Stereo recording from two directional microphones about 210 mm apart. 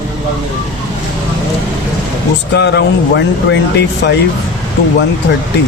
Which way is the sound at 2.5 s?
55° left (ahead or behind).